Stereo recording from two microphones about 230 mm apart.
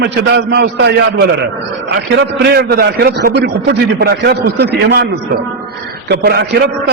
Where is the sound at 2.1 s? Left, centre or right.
Right.